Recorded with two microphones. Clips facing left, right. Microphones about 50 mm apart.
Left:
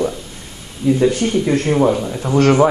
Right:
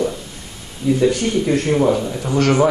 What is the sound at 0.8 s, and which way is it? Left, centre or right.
A man's voice, centre.